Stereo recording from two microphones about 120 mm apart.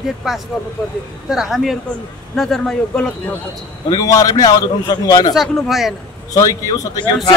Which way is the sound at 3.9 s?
30° left (ahead or behind).